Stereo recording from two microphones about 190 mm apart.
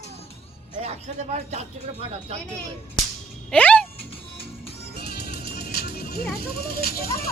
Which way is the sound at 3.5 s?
5° left (ahead or behind).